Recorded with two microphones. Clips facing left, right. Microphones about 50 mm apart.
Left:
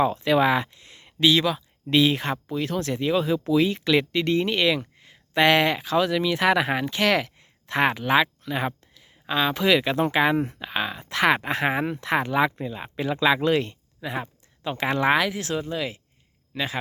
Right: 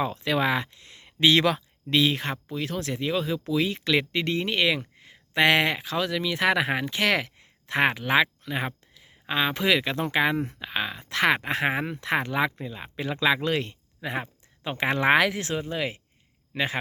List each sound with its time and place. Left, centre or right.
0.0 s speech: centre
1.3 s speech: right
1.9 s speech: centre; by 9.6 s right
10.1 s speech: centre
10.3 s speech: left
10.6 s speech: centre
14.0 s speech: right
15.1 s speech: right
15.4 s speech: right
15.7 s speech: right